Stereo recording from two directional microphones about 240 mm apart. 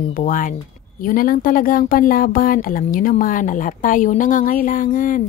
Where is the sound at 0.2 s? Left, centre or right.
Left.